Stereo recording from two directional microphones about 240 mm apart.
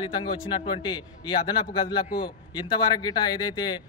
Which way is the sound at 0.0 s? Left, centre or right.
Left.